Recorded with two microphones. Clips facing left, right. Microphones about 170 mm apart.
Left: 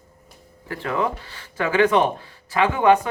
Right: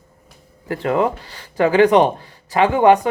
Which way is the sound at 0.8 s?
40° right (ahead or behind).